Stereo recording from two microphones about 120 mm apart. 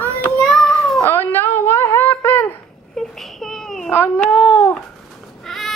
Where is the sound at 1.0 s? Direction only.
20° left (ahead or behind).